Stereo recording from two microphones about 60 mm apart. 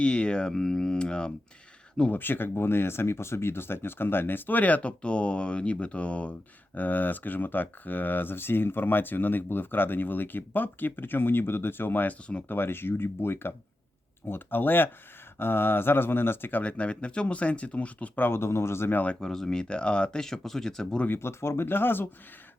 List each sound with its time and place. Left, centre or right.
0.0 s speech: centre
2.1 s speech: left
18.3 s speech: left
19.2 s speech: centre
21.1 s speech: left